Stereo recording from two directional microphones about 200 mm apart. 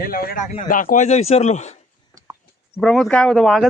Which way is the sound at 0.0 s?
45° left (ahead or behind).